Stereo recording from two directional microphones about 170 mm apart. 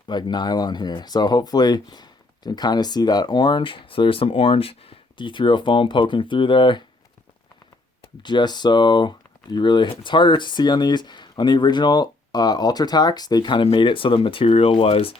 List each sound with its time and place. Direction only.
0.1 s speech: 25° left (ahead or behind)
8.2 s speech: 25° left (ahead or behind)